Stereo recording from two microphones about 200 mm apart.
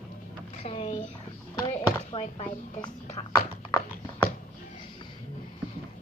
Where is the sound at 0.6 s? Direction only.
30° left (ahead or behind).